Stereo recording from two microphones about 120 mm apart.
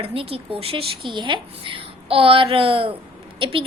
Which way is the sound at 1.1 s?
40° right (ahead or behind).